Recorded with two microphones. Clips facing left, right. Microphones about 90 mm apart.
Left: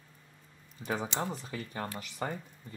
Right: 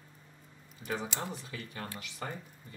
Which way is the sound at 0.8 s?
30° left (ahead or behind).